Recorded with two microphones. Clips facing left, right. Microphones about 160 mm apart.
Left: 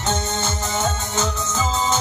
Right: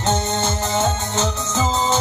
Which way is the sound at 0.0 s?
30° right (ahead or behind).